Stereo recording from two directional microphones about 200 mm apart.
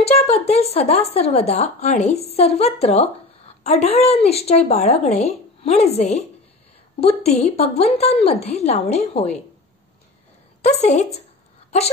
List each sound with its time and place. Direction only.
0.0 s a woman's voice: 30° left (ahead or behind)
10.6 s a woman's voice: 35° left (ahead or behind)